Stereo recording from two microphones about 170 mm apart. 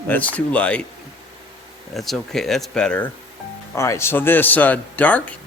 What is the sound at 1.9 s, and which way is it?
Speech, centre (ahead or behind).